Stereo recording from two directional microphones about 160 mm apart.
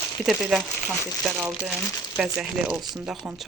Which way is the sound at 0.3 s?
Centre (ahead or behind).